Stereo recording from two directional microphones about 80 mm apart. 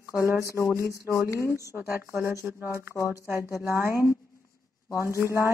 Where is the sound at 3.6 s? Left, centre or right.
Right.